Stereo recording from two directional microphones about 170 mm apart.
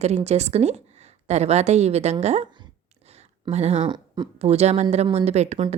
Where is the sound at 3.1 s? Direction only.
40° right (ahead or behind).